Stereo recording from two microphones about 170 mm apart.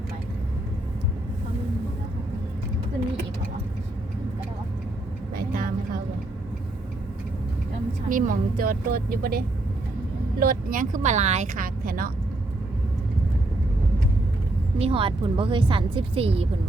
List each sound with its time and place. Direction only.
5.3 s vehicle: 60° right (ahead or behind)
8.1 s speech: 55° right (ahead or behind)
10.4 s speech: 55° right (ahead or behind)
14.8 s speech: 35° right (ahead or behind)